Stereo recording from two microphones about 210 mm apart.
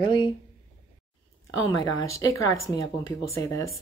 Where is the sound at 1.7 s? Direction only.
15° left (ahead or behind).